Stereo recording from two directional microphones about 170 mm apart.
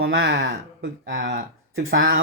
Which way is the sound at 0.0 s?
75° right (ahead or behind).